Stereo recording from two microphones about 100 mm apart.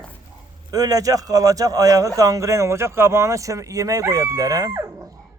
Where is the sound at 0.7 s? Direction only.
40° right (ahead or behind).